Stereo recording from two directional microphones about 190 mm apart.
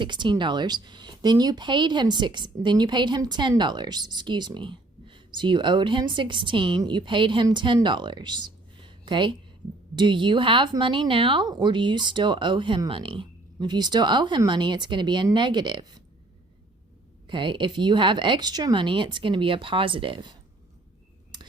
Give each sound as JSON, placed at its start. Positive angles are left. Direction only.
{"t": 0.0, "sound": "speech", "side_deg": -25}
{"t": 17.2, "sound": "speech", "side_deg": -25}
{"t": 21.3, "sound": "a sound", "side_deg": -25}